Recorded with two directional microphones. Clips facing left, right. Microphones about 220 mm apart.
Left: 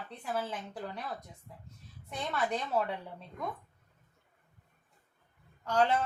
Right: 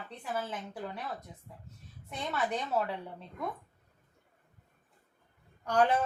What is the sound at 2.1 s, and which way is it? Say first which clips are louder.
Speech: even; 5° right (ahead or behind).